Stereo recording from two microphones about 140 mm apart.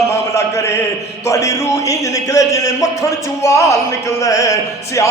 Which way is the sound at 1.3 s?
20° left (ahead or behind).